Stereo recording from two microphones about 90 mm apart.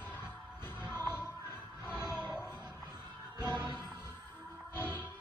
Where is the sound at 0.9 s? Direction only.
25° left (ahead or behind).